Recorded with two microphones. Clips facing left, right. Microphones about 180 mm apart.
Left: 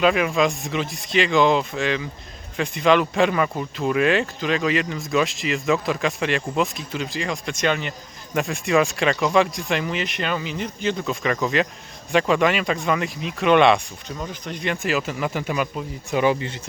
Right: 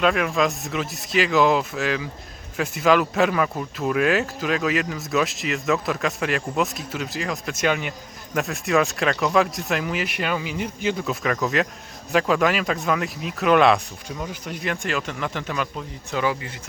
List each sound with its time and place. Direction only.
0.0 s speech: centre (ahead or behind)
16.1 s speech: 25° left (ahead or behind)